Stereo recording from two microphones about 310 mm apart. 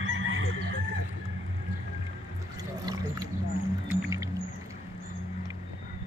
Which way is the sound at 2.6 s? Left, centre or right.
Centre.